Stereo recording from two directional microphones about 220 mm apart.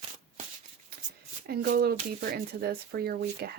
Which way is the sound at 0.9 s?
45° right (ahead or behind).